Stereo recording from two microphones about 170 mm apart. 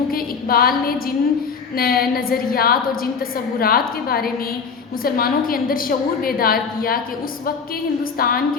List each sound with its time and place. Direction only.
0.1 s a woman's voice: 60° left (ahead or behind)
8.2 s a woman's voice: 60° left (ahead or behind)